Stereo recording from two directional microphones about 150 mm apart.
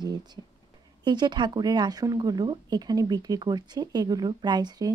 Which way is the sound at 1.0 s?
30° right (ahead or behind).